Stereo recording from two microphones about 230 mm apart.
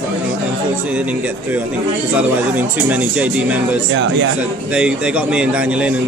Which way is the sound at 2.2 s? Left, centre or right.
Centre.